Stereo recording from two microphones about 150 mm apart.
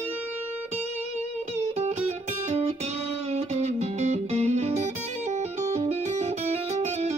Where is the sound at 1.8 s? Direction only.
45° right (ahead or behind).